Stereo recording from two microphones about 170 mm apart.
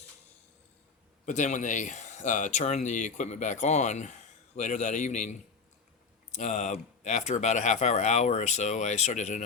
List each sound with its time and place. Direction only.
1.2 s speech: 45° left (ahead or behind)